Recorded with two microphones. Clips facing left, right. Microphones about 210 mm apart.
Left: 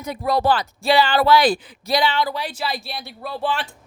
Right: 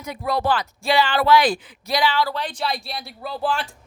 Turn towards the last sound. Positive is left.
turn(degrees=0)  # may be behind; listen again after turning